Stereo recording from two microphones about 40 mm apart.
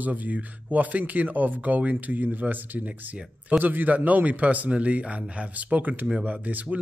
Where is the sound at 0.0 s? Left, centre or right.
Right.